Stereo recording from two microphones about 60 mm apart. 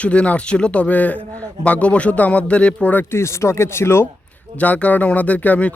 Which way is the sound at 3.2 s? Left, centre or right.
Left.